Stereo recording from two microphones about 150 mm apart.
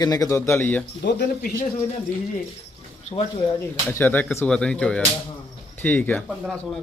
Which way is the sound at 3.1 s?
40° left (ahead or behind).